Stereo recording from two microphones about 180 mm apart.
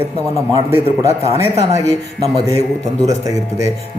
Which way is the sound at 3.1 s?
20° right (ahead or behind).